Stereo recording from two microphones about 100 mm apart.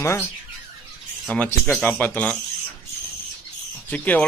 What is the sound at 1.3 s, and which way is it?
Speech, 10° left (ahead or behind).